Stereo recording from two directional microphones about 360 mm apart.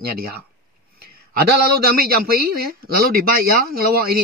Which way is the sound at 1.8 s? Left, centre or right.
Right.